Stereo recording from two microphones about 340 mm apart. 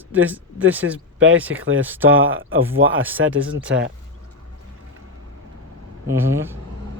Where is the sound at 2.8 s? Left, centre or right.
Right.